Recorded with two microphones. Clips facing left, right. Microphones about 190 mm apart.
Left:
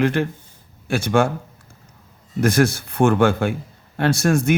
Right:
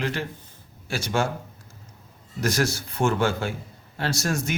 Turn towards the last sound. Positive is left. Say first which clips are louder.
# left 9 dB
turn(degrees=55)  # may be behind; listen again after turning